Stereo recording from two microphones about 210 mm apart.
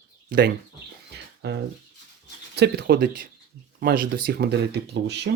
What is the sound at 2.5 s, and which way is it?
Speech, 50° right (ahead or behind).